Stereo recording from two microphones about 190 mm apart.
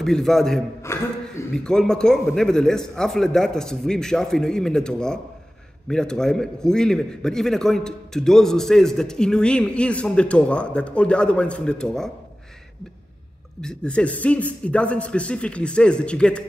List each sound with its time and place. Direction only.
0.0 s a man's voice: centre (ahead or behind)
0.9 s chuckle: 15° left (ahead or behind)
1.5 s a man's voice: 5° left (ahead or behind)
13.6 s a man's voice: 5° left (ahead or behind)